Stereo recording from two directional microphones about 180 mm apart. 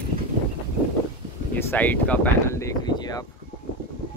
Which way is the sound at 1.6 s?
10° left (ahead or behind).